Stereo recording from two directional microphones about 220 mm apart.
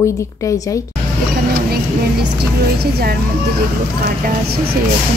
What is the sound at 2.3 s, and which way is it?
Speech, 45° right (ahead or behind).